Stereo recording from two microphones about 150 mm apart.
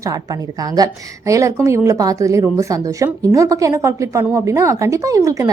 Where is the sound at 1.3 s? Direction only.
20° right (ahead or behind).